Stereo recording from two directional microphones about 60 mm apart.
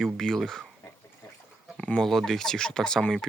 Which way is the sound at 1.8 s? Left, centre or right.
Centre.